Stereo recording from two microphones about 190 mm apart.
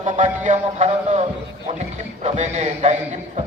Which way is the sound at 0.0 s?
40° right (ahead or behind).